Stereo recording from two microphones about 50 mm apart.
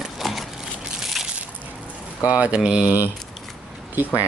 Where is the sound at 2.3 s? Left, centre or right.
Right.